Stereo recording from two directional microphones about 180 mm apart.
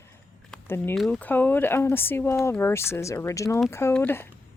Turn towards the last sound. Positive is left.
turn(degrees=10)  # may be behind; listen again after turning